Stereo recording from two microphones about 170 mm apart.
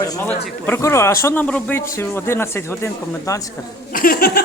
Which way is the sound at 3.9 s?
55° left (ahead or behind).